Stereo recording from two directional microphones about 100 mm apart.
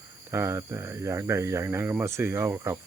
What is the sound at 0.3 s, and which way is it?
Speech, 25° right (ahead or behind).